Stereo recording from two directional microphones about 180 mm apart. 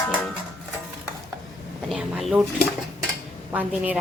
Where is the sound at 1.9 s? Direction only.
Centre (ahead or behind).